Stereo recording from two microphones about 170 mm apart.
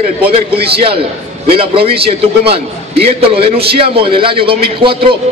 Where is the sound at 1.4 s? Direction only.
35° right (ahead or behind).